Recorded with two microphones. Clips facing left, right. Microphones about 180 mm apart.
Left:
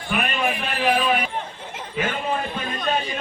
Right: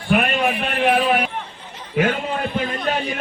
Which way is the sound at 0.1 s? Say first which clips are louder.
Right 5 dB; 65° right (ahead or behind).